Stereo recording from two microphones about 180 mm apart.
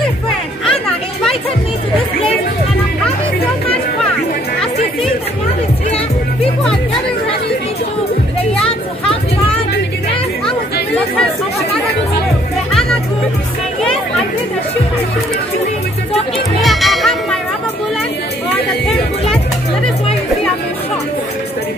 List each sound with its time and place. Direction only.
0.7 s chatter: 5° left (ahead or behind)
8.6 s a sound: 30° left (ahead or behind)
16.6 s music: centre (ahead or behind)